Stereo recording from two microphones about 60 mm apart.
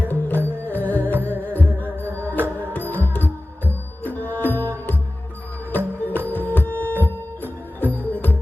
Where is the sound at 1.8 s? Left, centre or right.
Right.